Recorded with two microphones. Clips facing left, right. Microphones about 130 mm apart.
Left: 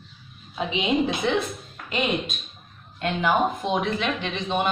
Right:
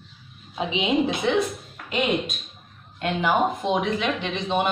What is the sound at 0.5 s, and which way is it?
Speech, 20° right (ahead or behind).